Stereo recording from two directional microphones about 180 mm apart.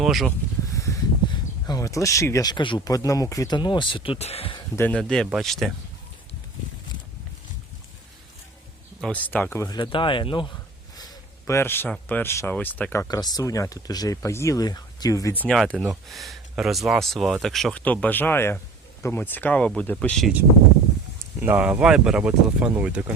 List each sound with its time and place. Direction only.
0.0 s speech: centre (ahead or behind)
0.7 s speech: 20° left (ahead or behind)
4.8 s speech: 5° left (ahead or behind)
9.0 s speech: 5° left (ahead or behind)
21.4 s speech: 10° right (ahead or behind)